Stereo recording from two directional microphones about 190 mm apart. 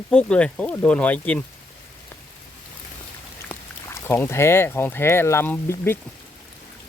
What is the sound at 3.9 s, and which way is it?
Speech, 15° left (ahead or behind).